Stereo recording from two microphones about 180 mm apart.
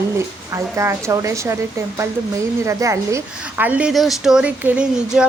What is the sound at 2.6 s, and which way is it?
A woman's voice, 15° right (ahead or behind).